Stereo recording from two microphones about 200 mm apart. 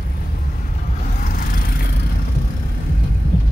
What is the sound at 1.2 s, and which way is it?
Vehicle, 45° left (ahead or behind).